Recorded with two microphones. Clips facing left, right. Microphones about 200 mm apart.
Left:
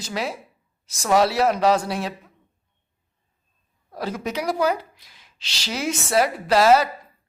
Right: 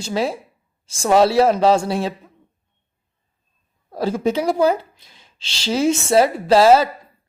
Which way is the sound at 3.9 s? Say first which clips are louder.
Right 8 dB; 30° right (ahead or behind).